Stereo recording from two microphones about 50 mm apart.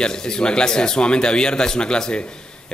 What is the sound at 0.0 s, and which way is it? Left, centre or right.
A man's voice, centre.